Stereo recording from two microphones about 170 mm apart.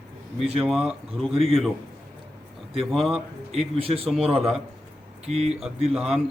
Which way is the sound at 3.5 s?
35° right (ahead or behind).